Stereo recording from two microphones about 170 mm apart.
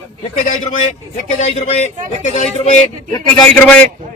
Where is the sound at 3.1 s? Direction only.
25° left (ahead or behind).